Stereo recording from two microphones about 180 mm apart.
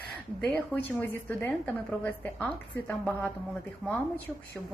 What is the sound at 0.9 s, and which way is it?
A woman's voice, 10° left (ahead or behind).